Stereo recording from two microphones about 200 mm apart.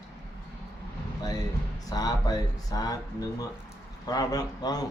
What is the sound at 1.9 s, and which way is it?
Speech, 20° left (ahead or behind).